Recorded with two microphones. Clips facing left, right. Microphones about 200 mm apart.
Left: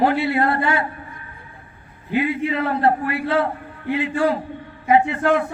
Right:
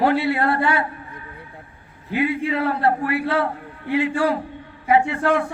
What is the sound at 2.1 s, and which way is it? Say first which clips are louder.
A man's voice: left 1 dB; 20° left (ahead or behind).